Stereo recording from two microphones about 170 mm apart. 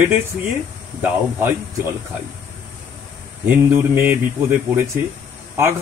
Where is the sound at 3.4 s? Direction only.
15° right (ahead or behind).